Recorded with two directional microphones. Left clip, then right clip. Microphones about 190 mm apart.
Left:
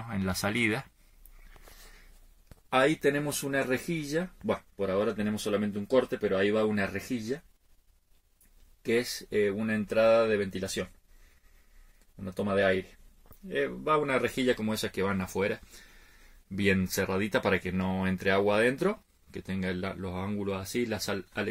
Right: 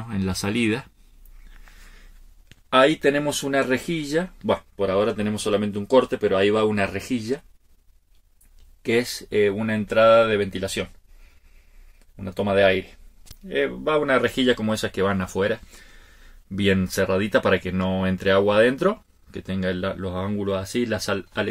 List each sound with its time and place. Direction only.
0.1 s speech: 25° left (ahead or behind)
2.7 s speech: 20° left (ahead or behind)
8.8 s speech: 20° left (ahead or behind)
12.3 s speech: 20° left (ahead or behind)